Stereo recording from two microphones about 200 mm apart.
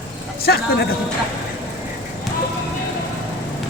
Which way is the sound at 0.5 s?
55° left (ahead or behind).